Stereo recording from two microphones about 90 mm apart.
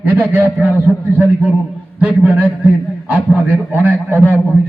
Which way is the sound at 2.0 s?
15° right (ahead or behind).